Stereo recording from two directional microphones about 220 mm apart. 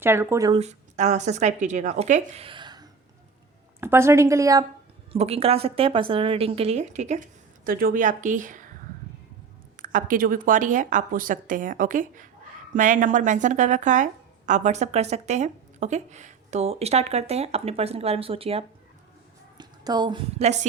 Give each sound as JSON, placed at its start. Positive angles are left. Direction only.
{"t": 0.0, "sound": "a woman's voice", "side_deg": -10}
{"t": 0.6, "sound": "a woman's voice", "side_deg": -30}
{"t": 5.1, "sound": "a woman's voice", "side_deg": -30}
{"t": 9.7, "sound": "a woman's voice", "side_deg": -40}